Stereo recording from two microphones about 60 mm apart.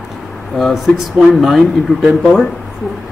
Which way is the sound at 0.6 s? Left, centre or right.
Centre.